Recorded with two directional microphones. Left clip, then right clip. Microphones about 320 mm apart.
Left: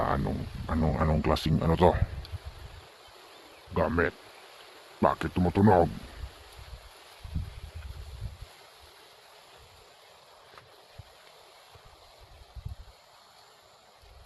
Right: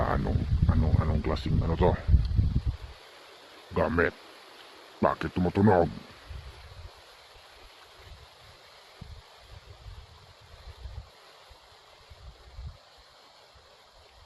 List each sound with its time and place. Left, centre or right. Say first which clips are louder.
0.0 s a sound: even; centre
0.8 s speech: left 7 dB; centre
3.8 s speech: right 1 dB; centre